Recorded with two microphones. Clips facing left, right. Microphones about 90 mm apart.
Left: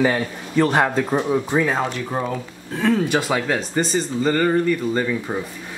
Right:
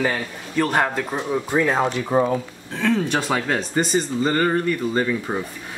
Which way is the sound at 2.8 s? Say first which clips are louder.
Left 2 dB; 5° left (ahead or behind).